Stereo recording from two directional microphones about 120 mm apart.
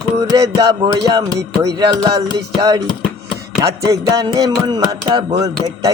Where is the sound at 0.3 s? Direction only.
30° right (ahead or behind).